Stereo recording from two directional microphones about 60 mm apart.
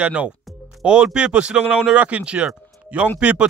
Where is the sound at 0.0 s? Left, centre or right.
Right.